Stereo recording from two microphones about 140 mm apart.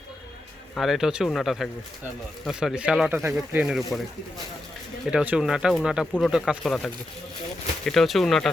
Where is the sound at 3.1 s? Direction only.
20° right (ahead or behind).